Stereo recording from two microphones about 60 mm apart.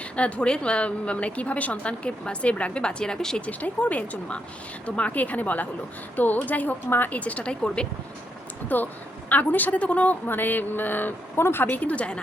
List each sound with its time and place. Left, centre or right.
0.2 s a woman's voice: centre
3.4 s a woman's voice: left
8.7 s a woman's voice: left
10.2 s speech: left
11.8 s a woman's voice: left